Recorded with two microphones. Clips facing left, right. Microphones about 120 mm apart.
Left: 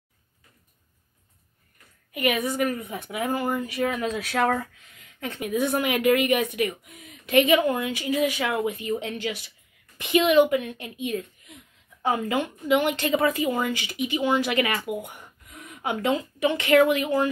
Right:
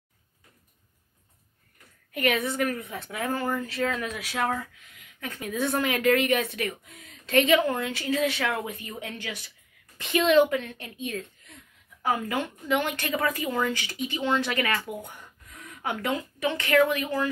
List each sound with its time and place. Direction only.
2.1 s a woman's voice: 5° left (ahead or behind)
4.3 s speech: 55° left (ahead or behind)
5.2 s a woman's voice: 20° left (ahead or behind)